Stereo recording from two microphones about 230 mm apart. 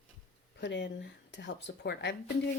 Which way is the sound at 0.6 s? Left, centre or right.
Left.